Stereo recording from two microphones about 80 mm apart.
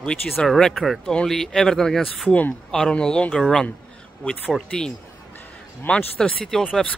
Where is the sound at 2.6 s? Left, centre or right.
Centre.